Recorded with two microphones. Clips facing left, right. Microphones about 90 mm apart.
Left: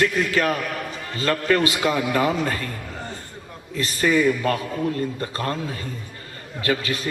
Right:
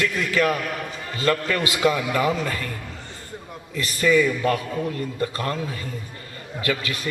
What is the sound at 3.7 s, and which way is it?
A man's voice, 35° left (ahead or behind).